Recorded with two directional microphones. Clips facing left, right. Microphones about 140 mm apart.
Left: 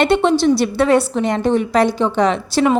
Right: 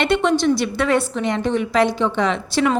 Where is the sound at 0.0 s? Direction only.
30° left (ahead or behind).